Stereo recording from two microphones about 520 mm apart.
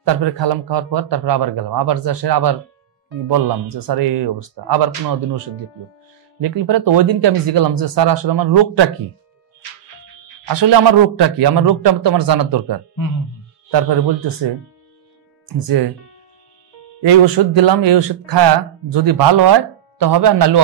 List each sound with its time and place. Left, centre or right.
0.0 s a man's voice: right
10.5 s speech: right
15.4 s speech: right
17.0 s speech: right